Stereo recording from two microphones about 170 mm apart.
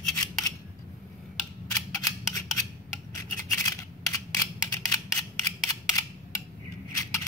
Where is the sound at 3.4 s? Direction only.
20° left (ahead or behind).